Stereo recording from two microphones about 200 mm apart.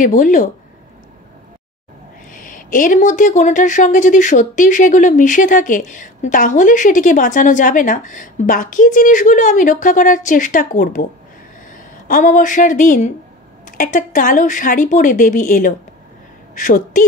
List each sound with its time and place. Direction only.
0.0 s speech: 40° left (ahead or behind)
2.3 s a woman's voice: 40° left (ahead or behind)